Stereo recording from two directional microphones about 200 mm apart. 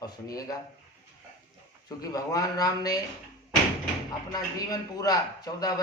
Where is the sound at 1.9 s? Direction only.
15° left (ahead or behind).